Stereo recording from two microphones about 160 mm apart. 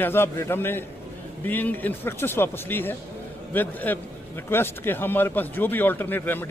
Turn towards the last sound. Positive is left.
turn(degrees=10)  # may be behind; listen again after turning